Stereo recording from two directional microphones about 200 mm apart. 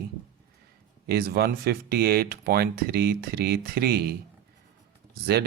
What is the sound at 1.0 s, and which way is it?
Speech, 50° right (ahead or behind).